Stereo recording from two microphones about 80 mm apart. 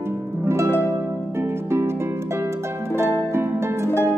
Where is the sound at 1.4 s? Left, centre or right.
Right.